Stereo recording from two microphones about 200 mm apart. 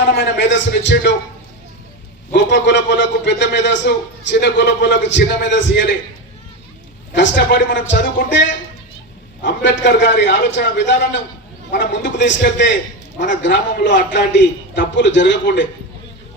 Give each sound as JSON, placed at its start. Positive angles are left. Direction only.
{"t": 0.1, "sound": "a man's voice", "side_deg": 60}
{"t": 2.3, "sound": "a man's voice", "side_deg": 60}
{"t": 7.1, "sound": "a man's voice", "side_deg": 65}